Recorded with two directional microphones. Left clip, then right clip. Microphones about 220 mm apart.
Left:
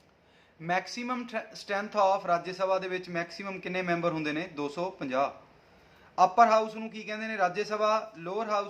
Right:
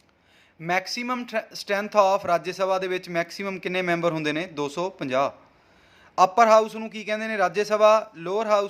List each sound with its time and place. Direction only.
0.6 s speech: 40° right (ahead or behind)